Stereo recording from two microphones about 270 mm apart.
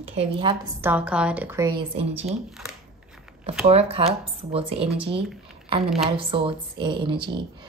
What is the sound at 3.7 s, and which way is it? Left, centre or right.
A woman's voice, right.